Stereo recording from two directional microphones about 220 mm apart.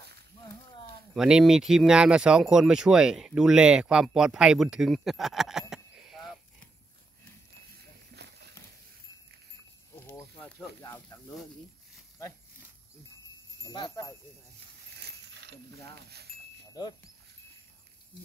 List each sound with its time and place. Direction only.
1.1 s speech: centre (ahead or behind)
8.2 s a sound: 50° right (ahead or behind)
9.9 s snake: 10° left (ahead or behind)
10.8 s speech: 15° left (ahead or behind)
13.7 s speech: 20° left (ahead or behind)
15.0 s a sound: 50° right (ahead or behind)